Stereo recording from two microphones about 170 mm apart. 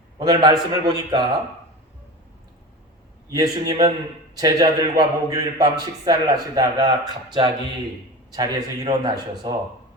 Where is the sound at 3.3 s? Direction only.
20° right (ahead or behind).